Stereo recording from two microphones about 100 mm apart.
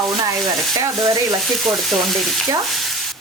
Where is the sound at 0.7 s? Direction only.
40° right (ahead or behind).